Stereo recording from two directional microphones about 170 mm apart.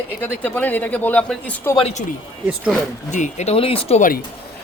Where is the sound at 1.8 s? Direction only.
35° left (ahead or behind).